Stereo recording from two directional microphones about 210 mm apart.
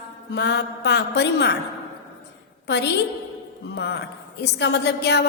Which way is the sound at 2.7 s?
55° left (ahead or behind).